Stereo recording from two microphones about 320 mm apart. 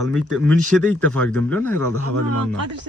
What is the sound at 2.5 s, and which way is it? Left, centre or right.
Speech, right.